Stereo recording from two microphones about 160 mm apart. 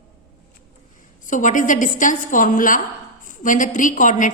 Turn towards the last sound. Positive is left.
turn(degrees=55)  # may be behind; listen again after turning